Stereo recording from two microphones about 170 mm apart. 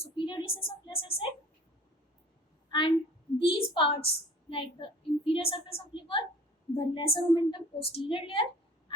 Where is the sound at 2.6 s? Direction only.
25° left (ahead or behind).